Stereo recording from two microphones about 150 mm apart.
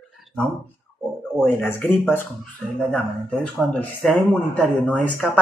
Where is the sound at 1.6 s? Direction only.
10° left (ahead or behind).